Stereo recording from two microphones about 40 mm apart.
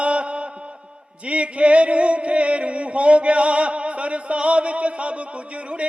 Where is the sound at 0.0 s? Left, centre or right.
Right.